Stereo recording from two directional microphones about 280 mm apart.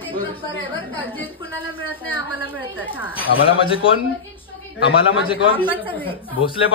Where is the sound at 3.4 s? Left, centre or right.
Centre.